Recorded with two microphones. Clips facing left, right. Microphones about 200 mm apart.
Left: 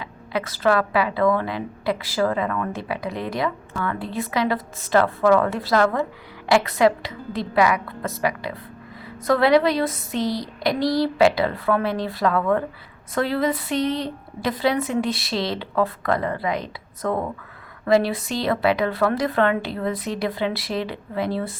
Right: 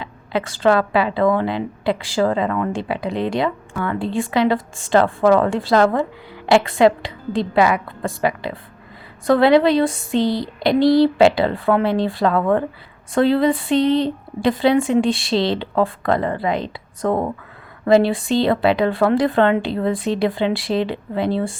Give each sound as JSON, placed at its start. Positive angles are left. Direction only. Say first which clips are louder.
{"t": 0.0, "sound": "a woman's voice", "louder": "right 4 dB", "side_deg": -25}